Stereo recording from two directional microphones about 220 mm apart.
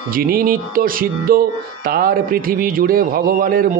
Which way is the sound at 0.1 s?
40° right (ahead or behind).